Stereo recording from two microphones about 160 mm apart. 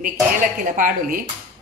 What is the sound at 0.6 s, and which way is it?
Speech, 60° right (ahead or behind).